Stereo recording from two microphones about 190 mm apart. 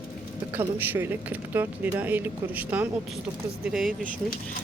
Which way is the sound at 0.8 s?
10° right (ahead or behind).